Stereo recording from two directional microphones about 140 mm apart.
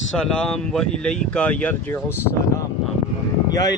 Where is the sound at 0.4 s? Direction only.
5° left (ahead or behind).